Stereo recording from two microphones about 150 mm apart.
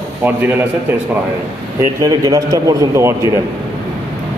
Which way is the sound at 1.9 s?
25° right (ahead or behind).